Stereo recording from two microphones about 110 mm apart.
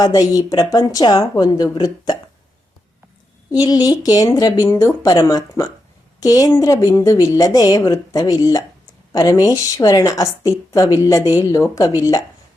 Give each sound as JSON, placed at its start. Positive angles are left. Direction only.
{"t": 0.0, "sound": "a woman's voice", "side_deg": 35}
{"t": 3.5, "sound": "a woman's voice", "side_deg": 35}